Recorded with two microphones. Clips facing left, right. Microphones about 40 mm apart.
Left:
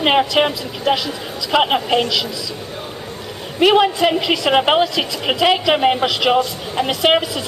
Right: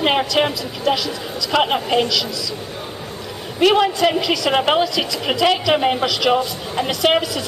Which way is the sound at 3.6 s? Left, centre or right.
Centre.